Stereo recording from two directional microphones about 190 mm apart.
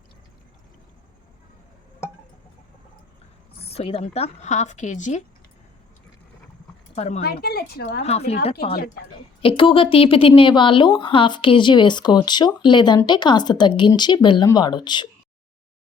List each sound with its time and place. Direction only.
3.6 s speech: 30° left (ahead or behind)
6.9 s speech: 35° left (ahead or behind)
7.2 s speech: 55° left (ahead or behind)
8.0 s speech: 35° left (ahead or behind)
9.4 s a woman's voice: 30° left (ahead or behind)